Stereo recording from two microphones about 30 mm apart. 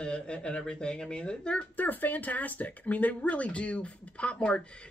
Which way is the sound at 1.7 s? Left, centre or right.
Left.